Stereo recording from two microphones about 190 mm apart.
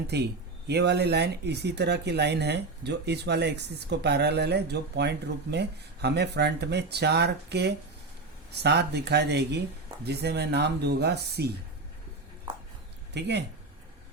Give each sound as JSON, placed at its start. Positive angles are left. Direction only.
{"t": 0.1, "sound": "speech", "side_deg": -60}
{"t": 13.1, "sound": "speech", "side_deg": -60}